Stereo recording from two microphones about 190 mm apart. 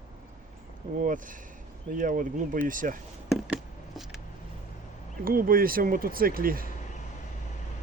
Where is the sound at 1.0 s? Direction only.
45° right (ahead or behind).